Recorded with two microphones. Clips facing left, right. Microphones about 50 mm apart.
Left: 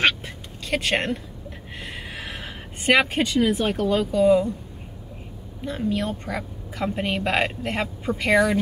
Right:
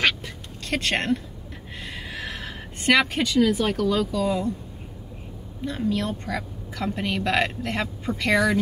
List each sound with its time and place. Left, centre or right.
0.7 s speech: centre
2.1 s a sound: centre
3.3 s a woman's voice: left
5.6 s a woman's voice: centre